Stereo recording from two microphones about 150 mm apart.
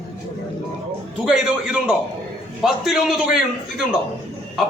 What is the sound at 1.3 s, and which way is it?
A man's voice, 5° right (ahead or behind).